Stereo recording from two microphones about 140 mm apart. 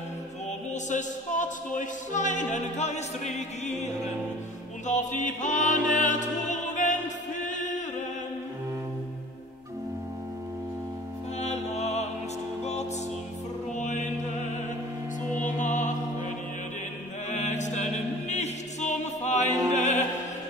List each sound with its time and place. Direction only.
0.8 s music: 65° left (ahead or behind)
11.3 s music: 50° left (ahead or behind)
13.7 s music: 60° left (ahead or behind)
15.2 s music: 65° left (ahead or behind)
17.3 s music: 55° left (ahead or behind)
19.7 s opera: 55° left (ahead or behind)